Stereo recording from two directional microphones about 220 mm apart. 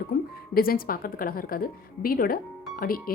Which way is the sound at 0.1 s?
45° left (ahead or behind).